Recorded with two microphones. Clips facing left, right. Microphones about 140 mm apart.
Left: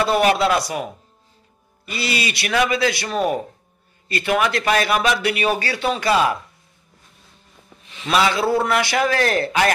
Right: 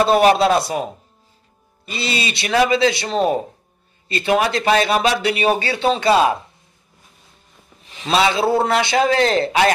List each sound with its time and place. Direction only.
0.0 s speech: 25° right (ahead or behind)
7.9 s speech: 30° right (ahead or behind)